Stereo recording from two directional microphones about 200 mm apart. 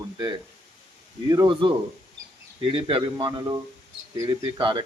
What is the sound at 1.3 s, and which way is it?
Speech, 20° right (ahead or behind).